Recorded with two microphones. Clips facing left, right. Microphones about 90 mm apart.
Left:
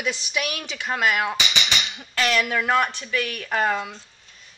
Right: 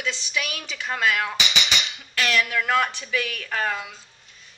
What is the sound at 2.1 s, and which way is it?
Speech, 30° left (ahead or behind).